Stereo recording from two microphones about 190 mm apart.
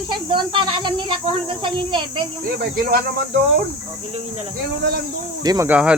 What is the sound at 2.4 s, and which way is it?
Speech, 55° right (ahead or behind).